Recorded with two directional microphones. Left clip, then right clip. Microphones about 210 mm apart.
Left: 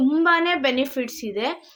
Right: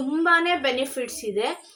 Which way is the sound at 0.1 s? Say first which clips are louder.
Right 3 dB; 50° left (ahead or behind).